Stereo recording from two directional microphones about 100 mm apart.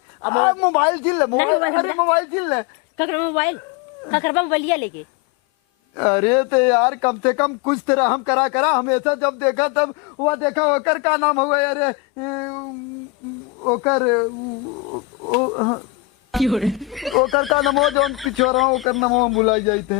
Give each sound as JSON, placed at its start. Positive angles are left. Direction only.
{"t": 0.2, "sound": "speech", "side_deg": 20}
{"t": 6.0, "sound": "speech", "side_deg": 20}
{"t": 13.7, "sound": "speech", "side_deg": 25}
{"t": 15.3, "sound": "speech", "side_deg": 30}
{"t": 16.3, "sound": "speech", "side_deg": 0}